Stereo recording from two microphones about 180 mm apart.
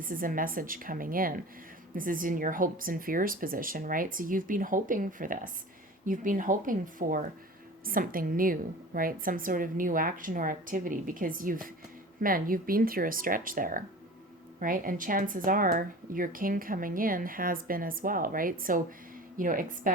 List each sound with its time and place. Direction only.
0.0 s speech: 50° right (ahead or behind)